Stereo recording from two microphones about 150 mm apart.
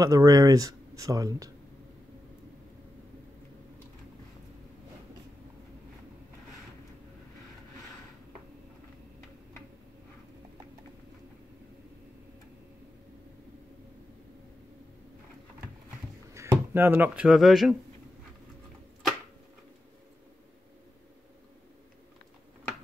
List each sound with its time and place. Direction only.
0.0 s speech: 25° right (ahead or behind)
16.3 s speech: 15° right (ahead or behind); by 17.7 s centre (ahead or behind)